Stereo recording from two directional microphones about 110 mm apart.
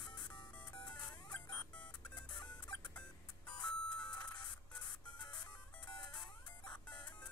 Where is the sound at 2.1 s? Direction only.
40° left (ahead or behind).